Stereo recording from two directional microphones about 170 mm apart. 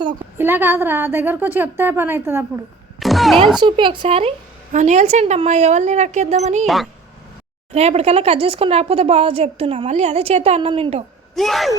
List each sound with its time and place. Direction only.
0.3 s a woman's voice: 15° right (ahead or behind)
3.0 s a sound: centre (ahead or behind)
3.6 s speech: 30° right (ahead or behind)
7.7 s speech: 40° right (ahead or behind)
11.3 s speech: centre (ahead or behind)